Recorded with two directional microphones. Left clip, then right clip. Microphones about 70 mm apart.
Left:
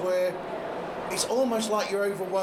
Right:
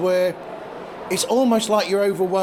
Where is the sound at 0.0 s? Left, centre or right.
Right.